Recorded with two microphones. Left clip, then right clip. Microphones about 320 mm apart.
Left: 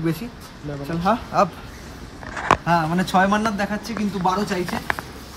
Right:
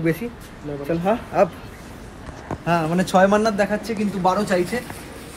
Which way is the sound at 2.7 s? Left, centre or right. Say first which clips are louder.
Even; centre.